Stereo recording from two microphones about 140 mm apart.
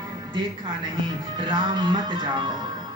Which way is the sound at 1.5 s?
35° right (ahead or behind).